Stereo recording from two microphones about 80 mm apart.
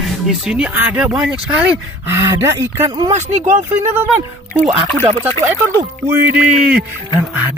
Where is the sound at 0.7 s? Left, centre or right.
Right.